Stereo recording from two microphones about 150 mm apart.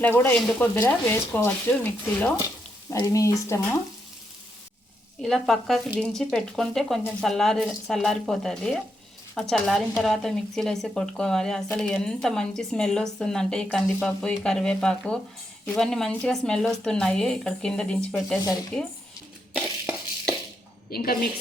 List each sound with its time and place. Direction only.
0.0 s speech: 15° left (ahead or behind)
2.9 s stir: 20° left (ahead or behind)
5.2 s speech: centre (ahead or behind)
19.5 s a sound: centre (ahead or behind)
20.9 s a woman's voice: 75° left (ahead or behind)